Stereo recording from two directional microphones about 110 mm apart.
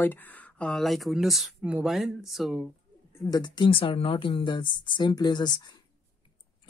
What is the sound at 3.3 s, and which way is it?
Speech, 40° left (ahead or behind).